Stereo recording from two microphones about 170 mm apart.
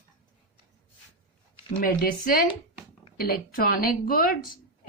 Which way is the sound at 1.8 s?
55° left (ahead or behind).